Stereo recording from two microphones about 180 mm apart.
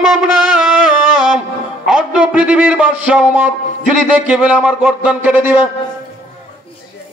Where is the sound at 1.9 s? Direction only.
5° right (ahead or behind).